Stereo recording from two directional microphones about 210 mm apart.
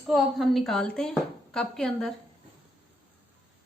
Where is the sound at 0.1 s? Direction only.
Centre (ahead or behind).